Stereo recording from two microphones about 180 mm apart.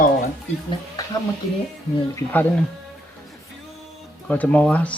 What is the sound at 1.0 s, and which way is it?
Speech, 20° left (ahead or behind).